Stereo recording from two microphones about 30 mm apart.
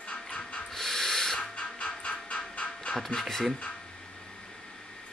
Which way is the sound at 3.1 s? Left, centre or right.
Centre.